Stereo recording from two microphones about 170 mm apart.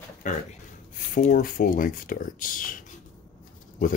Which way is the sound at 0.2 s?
45° left (ahead or behind).